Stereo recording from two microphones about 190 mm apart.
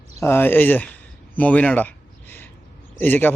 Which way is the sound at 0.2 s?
10° left (ahead or behind).